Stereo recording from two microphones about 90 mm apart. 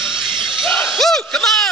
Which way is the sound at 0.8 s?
Centre (ahead or behind).